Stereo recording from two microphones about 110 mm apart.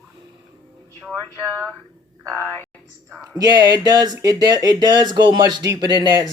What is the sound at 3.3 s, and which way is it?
Speech, 40° right (ahead or behind).